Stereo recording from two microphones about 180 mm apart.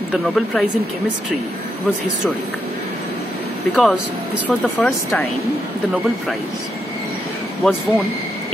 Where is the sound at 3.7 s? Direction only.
Centre (ahead or behind).